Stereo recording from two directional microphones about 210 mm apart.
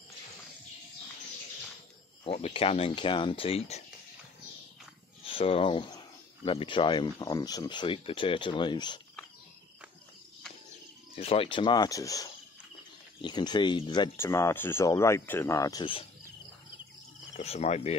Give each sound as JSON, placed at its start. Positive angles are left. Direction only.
{"t": 2.2, "sound": "speech", "side_deg": 25}
{"t": 5.2, "sound": "speech", "side_deg": 25}
{"t": 11.1, "sound": "speech", "side_deg": 25}
{"t": 17.4, "sound": "speech", "side_deg": 30}